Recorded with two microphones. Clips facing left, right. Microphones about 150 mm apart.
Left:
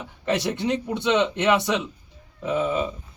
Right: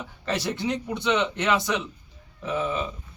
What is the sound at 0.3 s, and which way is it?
A man's voice, 20° left (ahead or behind).